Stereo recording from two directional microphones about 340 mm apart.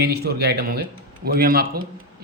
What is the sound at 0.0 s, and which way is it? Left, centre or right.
Speech, right.